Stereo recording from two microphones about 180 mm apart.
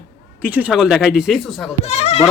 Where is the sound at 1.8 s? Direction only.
35° left (ahead or behind).